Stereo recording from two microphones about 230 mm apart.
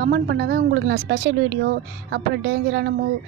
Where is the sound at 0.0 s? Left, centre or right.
Right.